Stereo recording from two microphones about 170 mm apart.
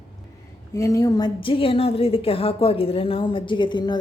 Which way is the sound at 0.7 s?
20° left (ahead or behind).